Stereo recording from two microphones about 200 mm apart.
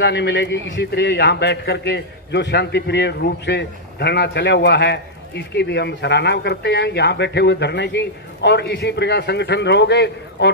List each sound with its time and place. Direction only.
0.0 s a man's voice: 60° left (ahead or behind)